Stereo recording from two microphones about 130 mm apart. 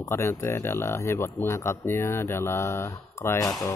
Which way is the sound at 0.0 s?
20° left (ahead or behind).